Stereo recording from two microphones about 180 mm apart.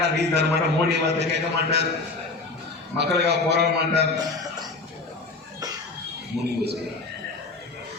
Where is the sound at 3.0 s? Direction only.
70° right (ahead or behind).